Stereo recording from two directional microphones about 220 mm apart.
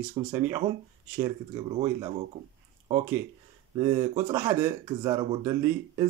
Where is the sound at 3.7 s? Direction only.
15° right (ahead or behind).